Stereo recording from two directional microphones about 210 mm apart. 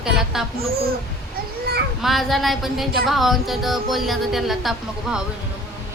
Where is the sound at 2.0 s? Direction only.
Centre (ahead or behind).